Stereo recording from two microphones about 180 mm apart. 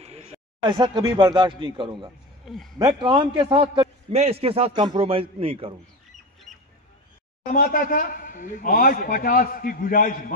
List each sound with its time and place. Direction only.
0.0 s a sound: 35° right (ahead or behind)
0.6 s speech: 25° right (ahead or behind)
2.4 s speech: centre (ahead or behind)
3.0 s a man's voice: 25° right (ahead or behind)
6.5 s squawk: 40° right (ahead or behind)
7.4 s a man's voice: 50° left (ahead or behind)